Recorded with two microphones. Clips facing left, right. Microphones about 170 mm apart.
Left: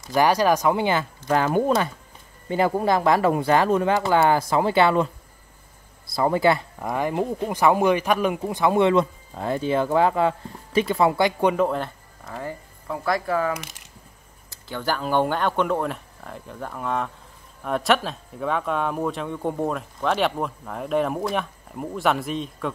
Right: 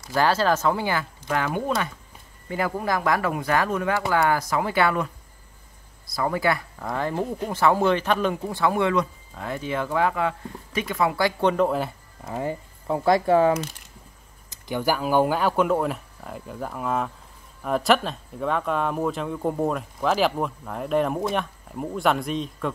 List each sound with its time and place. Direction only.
0.0 s speech: 15° left (ahead or behind)
1.3 s speech: 35° left (ahead or behind)
6.8 s speech: 15° left (ahead or behind)
11.5 s speech: centre (ahead or behind)
12.3 s speech: 20° right (ahead or behind)
14.5 s speech: 15° right (ahead or behind)